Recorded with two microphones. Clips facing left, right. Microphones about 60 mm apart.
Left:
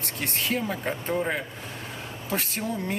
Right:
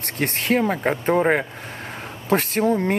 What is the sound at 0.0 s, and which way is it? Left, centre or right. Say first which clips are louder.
Speech: right 5 dB; right.